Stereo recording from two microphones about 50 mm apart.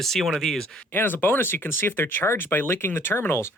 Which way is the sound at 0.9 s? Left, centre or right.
Left.